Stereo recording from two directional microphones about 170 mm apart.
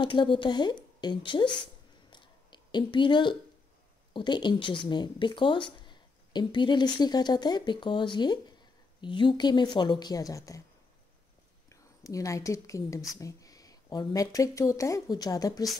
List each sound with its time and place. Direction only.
0.0 s speech: 30° left (ahead or behind)
2.0 s a sound: 25° left (ahead or behind)
4.1 s speech: 25° left (ahead or behind)
11.7 s a woman's voice: 20° left (ahead or behind)